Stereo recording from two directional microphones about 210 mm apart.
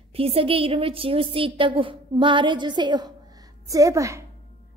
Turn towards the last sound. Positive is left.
turn(degrees=-15)  # may be behind; listen again after turning